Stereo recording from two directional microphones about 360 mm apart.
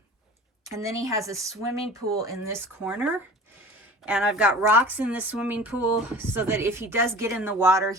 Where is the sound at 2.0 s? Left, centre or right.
Right.